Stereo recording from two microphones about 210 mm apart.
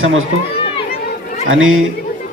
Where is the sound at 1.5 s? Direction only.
75° right (ahead or behind).